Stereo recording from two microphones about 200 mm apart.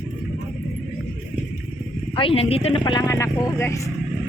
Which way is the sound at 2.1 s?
25° left (ahead or behind).